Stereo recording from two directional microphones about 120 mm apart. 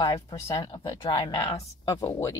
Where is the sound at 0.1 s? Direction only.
35° left (ahead or behind).